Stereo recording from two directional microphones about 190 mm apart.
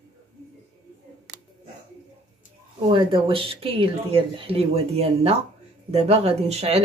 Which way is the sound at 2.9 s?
30° right (ahead or behind).